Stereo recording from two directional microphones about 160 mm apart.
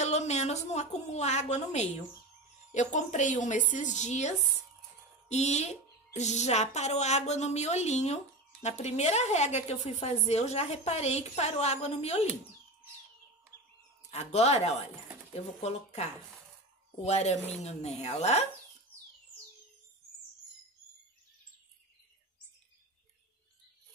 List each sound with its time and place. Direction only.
0.0 s a woman's voice: 45° left (ahead or behind)
14.1 s a woman's voice: 45° left (ahead or behind)